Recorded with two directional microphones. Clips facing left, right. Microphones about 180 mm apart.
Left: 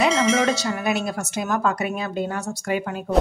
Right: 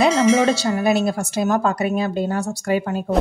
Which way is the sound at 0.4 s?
30° right (ahead or behind).